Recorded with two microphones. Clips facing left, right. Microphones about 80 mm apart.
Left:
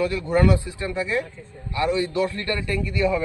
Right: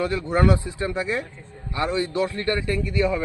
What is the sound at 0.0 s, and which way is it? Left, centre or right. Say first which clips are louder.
Speech: left 1 dB; right.